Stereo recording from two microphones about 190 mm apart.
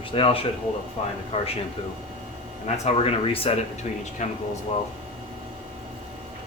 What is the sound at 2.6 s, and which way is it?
Speech, 35° left (ahead or behind).